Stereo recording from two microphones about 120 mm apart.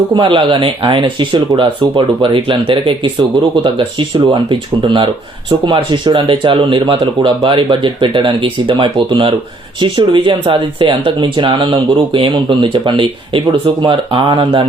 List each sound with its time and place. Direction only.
0.1 s speech: 45° right (ahead or behind)